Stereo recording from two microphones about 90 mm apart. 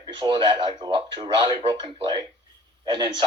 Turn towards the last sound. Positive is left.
turn(degrees=-55)  # may be behind; listen again after turning